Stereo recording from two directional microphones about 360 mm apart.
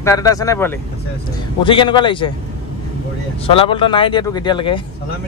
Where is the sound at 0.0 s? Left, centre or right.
Centre.